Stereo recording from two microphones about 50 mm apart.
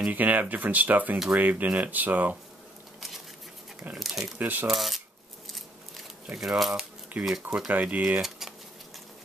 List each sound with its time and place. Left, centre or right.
0.1 s speech: right
4.0 s speech: centre
4.4 s speech: right
4.6 s speech: centre
6.6 s speech: centre
7.1 s speech: right
7.4 s speech: centre
7.7 s speech: right
8.2 s a sound: centre